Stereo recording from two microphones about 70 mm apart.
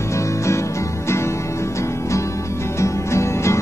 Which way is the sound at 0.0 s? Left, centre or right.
Left.